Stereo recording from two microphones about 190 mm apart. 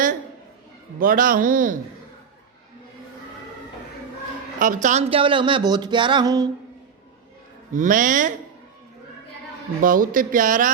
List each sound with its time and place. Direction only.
0.9 s speech: 45° right (ahead or behind)
4.6 s speech: 45° right (ahead or behind); by 6.5 s 20° right (ahead or behind)
7.7 s speech: 45° right (ahead or behind)
9.8 s speech: 45° right (ahead or behind)